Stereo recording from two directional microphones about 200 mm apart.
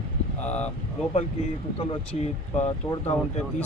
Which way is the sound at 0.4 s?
5° left (ahead or behind).